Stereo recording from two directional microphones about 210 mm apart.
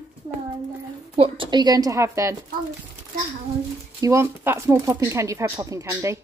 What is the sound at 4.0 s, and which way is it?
Speech, 15° right (ahead or behind).